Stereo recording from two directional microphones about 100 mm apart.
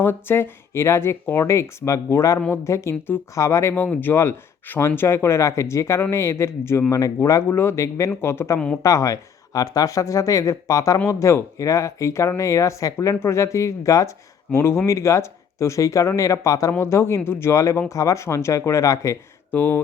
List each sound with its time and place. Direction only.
0.0 s speech: 20° left (ahead or behind)
8.5 s speech: 10° left (ahead or behind)
8.8 s speech: 30° left (ahead or behind)
19.5 s speech: 20° left (ahead or behind)